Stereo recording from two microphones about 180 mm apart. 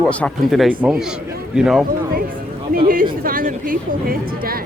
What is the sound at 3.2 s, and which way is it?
A woman's voice, 50° right (ahead or behind).